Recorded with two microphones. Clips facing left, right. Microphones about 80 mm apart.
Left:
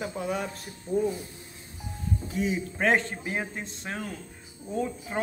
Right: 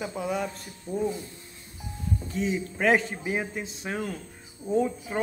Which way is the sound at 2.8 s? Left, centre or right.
Centre.